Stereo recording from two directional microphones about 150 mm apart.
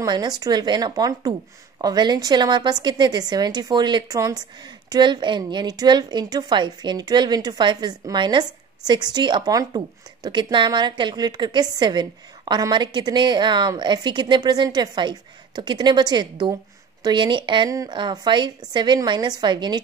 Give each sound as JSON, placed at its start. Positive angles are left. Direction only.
{"t": 0.0, "sound": "a woman's voice", "side_deg": -25}